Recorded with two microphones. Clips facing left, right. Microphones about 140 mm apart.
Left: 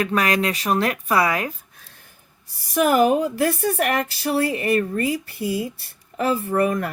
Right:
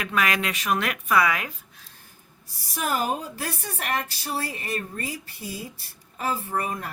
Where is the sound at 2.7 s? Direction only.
65° left (ahead or behind).